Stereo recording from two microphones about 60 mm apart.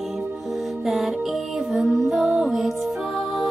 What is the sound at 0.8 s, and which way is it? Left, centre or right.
Music, centre.